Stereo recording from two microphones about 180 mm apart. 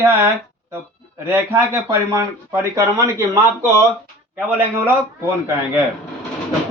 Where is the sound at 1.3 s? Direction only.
10° right (ahead or behind).